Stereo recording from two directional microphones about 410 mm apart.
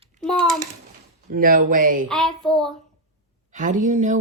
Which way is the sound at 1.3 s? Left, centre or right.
Centre.